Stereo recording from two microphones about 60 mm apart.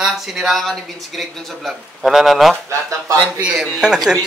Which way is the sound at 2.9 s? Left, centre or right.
Right.